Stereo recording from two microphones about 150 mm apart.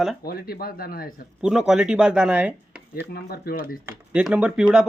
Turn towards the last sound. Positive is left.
turn(degrees=-5)  # may be behind; listen again after turning